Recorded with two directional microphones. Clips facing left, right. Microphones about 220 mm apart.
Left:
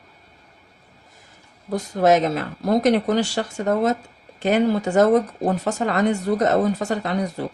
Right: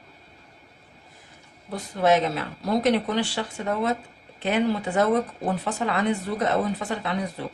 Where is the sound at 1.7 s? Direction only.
45° left (ahead or behind).